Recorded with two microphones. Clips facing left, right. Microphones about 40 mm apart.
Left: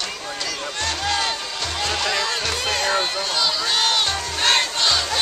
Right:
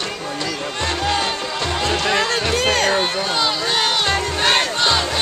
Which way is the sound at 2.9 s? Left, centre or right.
Centre.